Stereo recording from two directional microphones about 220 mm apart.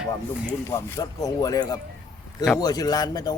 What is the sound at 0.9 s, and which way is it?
Speech, 15° left (ahead or behind).